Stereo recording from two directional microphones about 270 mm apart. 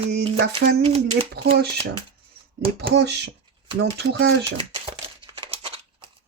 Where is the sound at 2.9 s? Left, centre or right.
Right.